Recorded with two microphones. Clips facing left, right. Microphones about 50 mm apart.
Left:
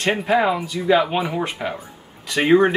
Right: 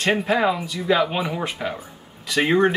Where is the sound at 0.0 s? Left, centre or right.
Centre.